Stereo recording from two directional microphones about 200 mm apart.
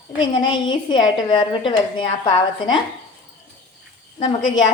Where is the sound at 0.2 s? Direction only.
20° left (ahead or behind).